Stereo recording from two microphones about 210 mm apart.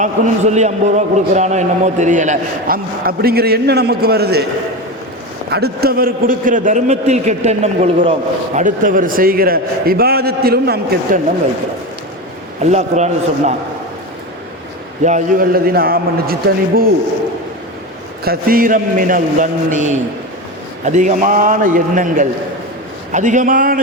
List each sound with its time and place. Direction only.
0.0 s a man's voice: 35° right (ahead or behind); by 4.4 s 50° right (ahead or behind)
5.5 s a man's voice: 50° right (ahead or behind)
12.7 s a man's voice: 35° right (ahead or behind)
15.0 s a man's voice: 40° right (ahead or behind)
18.3 s a man's voice: 45° right (ahead or behind)